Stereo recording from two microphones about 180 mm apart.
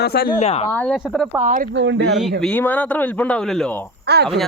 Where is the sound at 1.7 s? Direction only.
85° right.